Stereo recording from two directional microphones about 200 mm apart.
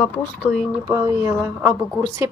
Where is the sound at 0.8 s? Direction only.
15° right (ahead or behind).